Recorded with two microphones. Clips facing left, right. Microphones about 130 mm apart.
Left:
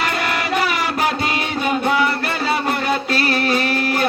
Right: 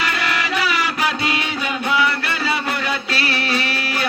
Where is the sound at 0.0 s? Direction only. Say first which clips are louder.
Left 1 dB; 45° left (ahead or behind).